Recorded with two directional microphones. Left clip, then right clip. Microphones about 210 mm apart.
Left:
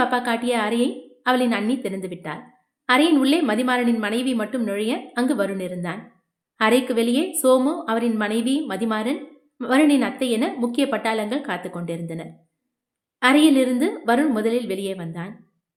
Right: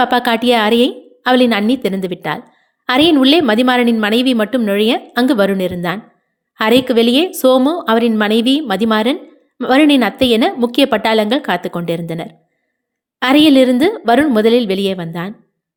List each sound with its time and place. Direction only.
0.0 s a woman's voice: 40° right (ahead or behind)